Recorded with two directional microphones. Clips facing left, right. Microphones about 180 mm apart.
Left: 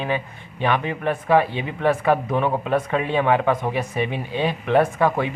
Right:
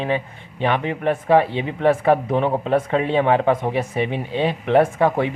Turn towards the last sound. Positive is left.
turn(degrees=-25)  # may be behind; listen again after turning